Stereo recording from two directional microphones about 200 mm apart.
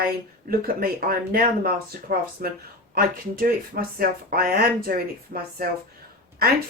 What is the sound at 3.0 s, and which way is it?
Speech, 45° right (ahead or behind).